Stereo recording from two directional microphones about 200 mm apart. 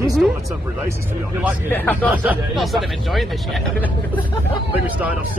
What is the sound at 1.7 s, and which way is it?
Speech, 10° left (ahead or behind).